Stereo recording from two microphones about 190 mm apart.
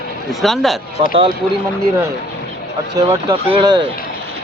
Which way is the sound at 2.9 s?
20° right (ahead or behind).